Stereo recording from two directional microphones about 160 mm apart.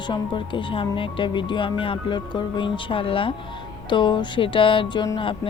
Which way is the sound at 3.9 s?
30° left (ahead or behind).